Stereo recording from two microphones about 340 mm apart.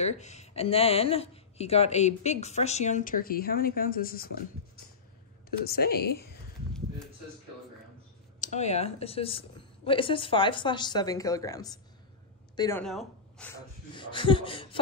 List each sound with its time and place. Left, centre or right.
0.0 s speech: centre
5.7 s speech: left
8.4 s a woman's voice: centre
13.9 s a woman's voice: centre